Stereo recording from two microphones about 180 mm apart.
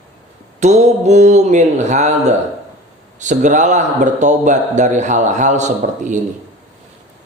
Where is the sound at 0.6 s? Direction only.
40° right (ahead or behind).